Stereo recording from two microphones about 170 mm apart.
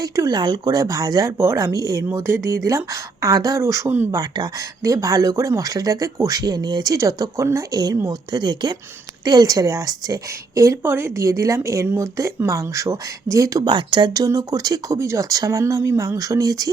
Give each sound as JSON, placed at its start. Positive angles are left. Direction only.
{"t": 0.0, "sound": "a woman's voice", "side_deg": -20}